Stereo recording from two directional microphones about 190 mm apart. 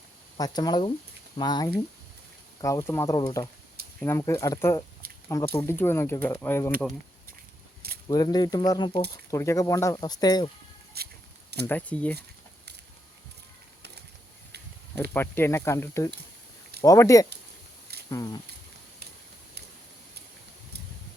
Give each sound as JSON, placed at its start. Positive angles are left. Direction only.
{"t": 0.3, "sound": "speech", "side_deg": 20}
{"t": 5.6, "sound": "speech", "side_deg": 15}
{"t": 8.0, "sound": "speech", "side_deg": 20}
{"t": 11.0, "sound": "a sound", "side_deg": -55}
{"t": 11.6, "sound": "speech", "side_deg": 10}
{"t": 15.1, "sound": "speech", "side_deg": 10}